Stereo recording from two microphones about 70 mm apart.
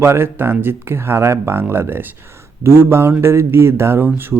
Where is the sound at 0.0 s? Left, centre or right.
Right.